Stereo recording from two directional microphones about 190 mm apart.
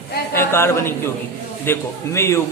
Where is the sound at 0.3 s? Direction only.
15° left (ahead or behind).